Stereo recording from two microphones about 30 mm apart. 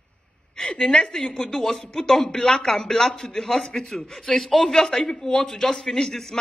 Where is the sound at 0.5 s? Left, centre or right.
Left.